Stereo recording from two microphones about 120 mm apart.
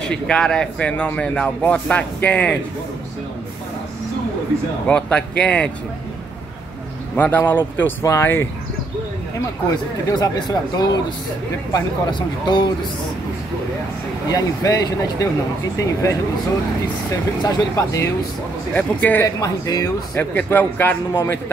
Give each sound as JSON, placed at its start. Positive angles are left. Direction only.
{"t": 0.0, "sound": "speech", "side_deg": 5}
{"t": 4.8, "sound": "speech", "side_deg": 10}
{"t": 7.2, "sound": "speech", "side_deg": 15}
{"t": 10.1, "sound": "speech", "side_deg": 35}
{"t": 14.3, "sound": "speech", "side_deg": 30}
{"t": 17.4, "sound": "speech", "side_deg": 35}
{"t": 18.7, "sound": "speech", "side_deg": 15}
{"t": 19.4, "sound": "speech", "side_deg": 30}
{"t": 20.2, "sound": "speech", "side_deg": 15}